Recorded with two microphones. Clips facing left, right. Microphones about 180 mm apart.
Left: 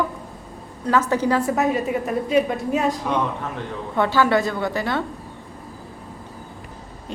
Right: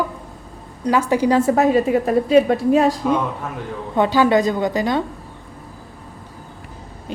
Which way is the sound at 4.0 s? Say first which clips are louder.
Right 3 dB; 15° right (ahead or behind).